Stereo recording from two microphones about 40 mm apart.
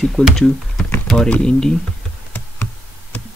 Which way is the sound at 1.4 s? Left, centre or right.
Centre.